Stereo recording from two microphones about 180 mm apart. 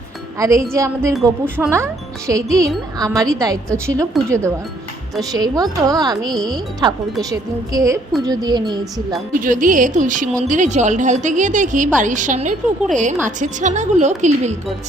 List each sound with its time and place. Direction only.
0.3 s speech: 15° right (ahead or behind)
9.4 s a woman's voice: 45° right (ahead or behind)